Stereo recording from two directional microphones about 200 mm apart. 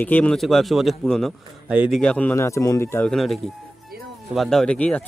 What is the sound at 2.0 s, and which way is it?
Speech, 5° left (ahead or behind).